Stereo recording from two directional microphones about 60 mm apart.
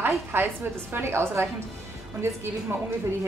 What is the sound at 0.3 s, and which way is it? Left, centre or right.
A woman's voice, right.